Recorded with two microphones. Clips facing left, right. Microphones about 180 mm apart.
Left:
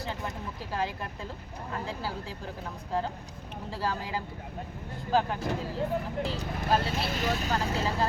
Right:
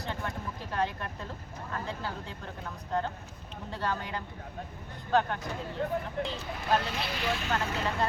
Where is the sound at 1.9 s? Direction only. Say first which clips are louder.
Left 1 dB; 5° left (ahead or behind).